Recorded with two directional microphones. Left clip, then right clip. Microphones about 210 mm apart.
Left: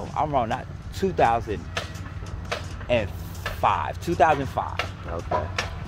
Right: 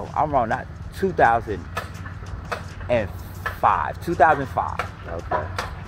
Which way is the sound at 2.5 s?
10° left (ahead or behind).